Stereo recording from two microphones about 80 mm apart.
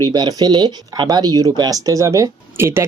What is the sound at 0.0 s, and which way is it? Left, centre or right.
Speech, right.